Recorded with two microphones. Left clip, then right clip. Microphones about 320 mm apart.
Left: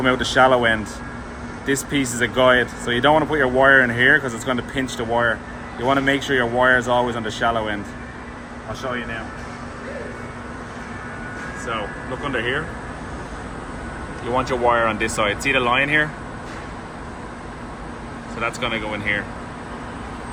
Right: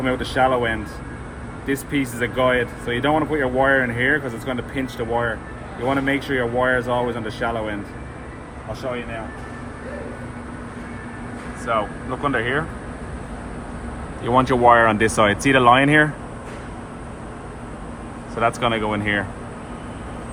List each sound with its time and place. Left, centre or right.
0.0 s speech: centre
11.7 s speech: right
14.3 s speech: right
18.3 s speech: right